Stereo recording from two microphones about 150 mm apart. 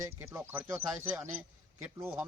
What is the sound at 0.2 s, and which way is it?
Speech, 15° right (ahead or behind).